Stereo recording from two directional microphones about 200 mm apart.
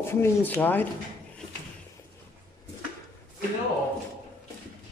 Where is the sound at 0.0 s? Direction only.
10° left (ahead or behind).